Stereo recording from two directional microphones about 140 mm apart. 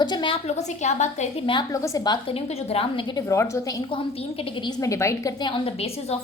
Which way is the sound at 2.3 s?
45° left (ahead or behind).